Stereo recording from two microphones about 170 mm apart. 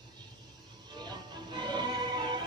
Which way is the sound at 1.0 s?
25° right (ahead or behind).